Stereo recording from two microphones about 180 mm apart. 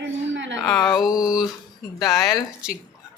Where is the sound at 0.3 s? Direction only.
90° right.